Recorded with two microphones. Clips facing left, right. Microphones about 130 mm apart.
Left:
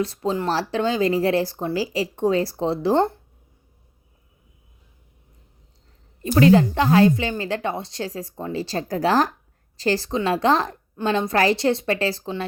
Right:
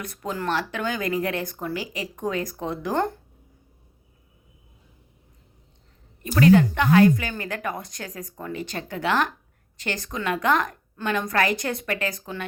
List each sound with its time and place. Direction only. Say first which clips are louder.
0.0 s speech: left 6 dB; 30° left (ahead or behind)
6.2 s a woman's voice: left 2 dB; 30° left (ahead or behind)